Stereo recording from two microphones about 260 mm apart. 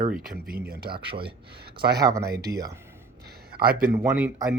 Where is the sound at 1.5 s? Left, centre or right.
Right.